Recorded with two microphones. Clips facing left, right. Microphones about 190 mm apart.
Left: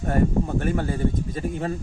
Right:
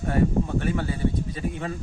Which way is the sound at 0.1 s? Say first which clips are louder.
Left 1 dB; 45° left (ahead or behind).